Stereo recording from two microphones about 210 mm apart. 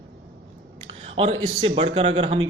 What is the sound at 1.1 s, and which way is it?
Speech, 30° right (ahead or behind).